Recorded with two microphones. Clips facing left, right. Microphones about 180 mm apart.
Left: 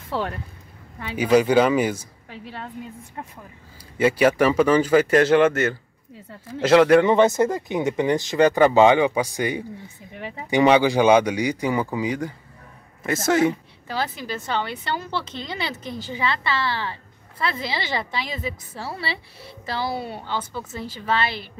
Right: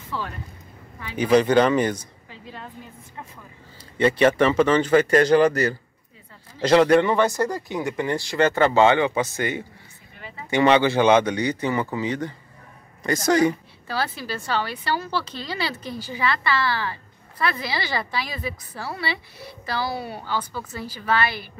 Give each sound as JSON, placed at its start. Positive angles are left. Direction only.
{"t": 0.1, "sound": "speech", "side_deg": 70}
{"t": 1.1, "sound": "speech", "side_deg": 10}
{"t": 2.2, "sound": "a woman's voice", "side_deg": 70}
{"t": 4.0, "sound": "a man's voice", "side_deg": 5}
{"t": 7.1, "sound": "a man's voice", "side_deg": 20}
{"t": 13.8, "sound": "a woman's voice", "side_deg": 20}